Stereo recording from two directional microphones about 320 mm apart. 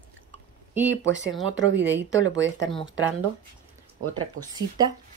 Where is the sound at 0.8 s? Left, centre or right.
Right.